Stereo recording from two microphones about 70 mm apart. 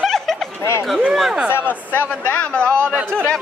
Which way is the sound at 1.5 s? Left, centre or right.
Left.